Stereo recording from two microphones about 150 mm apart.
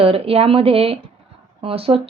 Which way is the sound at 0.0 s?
40° right (ahead or behind).